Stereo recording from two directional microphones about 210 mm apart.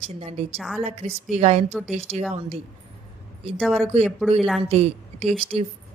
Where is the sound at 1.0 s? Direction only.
30° right (ahead or behind).